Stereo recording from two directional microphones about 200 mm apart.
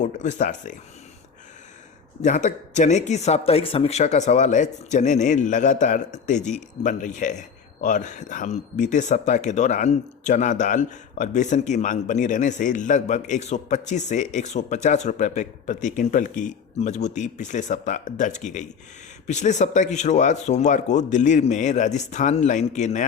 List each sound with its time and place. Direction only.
0.0 s a man's voice: 35° left (ahead or behind)
2.2 s a man's voice: 40° left (ahead or behind)